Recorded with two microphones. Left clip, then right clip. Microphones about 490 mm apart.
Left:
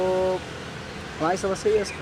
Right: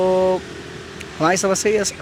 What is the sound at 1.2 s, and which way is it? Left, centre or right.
Speech, right.